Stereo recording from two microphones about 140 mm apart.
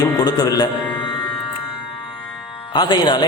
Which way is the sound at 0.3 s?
25° left (ahead or behind).